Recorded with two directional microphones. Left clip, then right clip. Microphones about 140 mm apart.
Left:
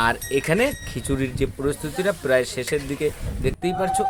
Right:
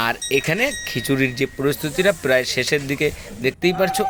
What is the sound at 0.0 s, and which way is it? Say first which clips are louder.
Speech: right 1 dB; 20° right (ahead or behind).